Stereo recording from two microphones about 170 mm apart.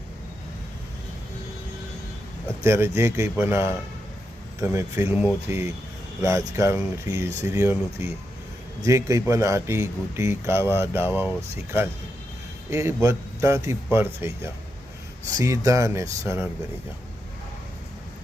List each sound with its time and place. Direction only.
2.6 s speech: 15° right (ahead or behind)